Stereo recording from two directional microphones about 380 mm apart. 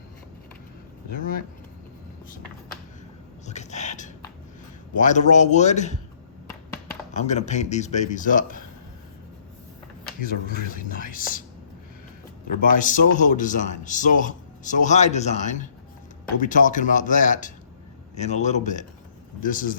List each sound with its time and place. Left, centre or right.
3.4 s a sound: centre
4.9 s speech: centre
7.1 s speech: centre
10.2 s a man's voice: left
12.7 s a man's voice: centre